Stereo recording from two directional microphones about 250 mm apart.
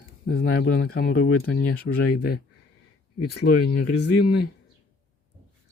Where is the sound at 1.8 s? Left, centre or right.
Left.